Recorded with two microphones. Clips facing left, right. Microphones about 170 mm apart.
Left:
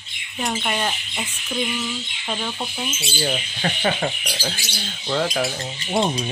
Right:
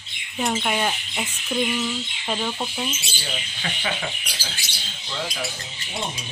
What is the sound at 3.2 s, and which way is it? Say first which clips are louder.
Speech: left 13 dB; 45° left (ahead or behind).